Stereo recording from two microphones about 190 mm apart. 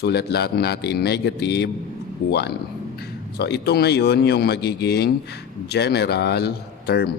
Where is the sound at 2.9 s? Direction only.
60° left (ahead or behind).